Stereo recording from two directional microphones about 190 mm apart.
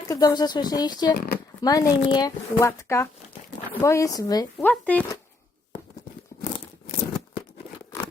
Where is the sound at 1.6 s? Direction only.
20° left (ahead or behind).